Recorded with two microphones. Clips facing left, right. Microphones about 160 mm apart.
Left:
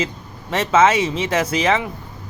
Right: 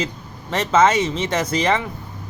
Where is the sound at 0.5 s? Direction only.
5° left (ahead or behind).